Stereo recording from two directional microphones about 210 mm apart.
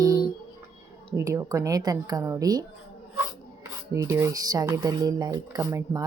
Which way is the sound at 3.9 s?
15° right (ahead or behind).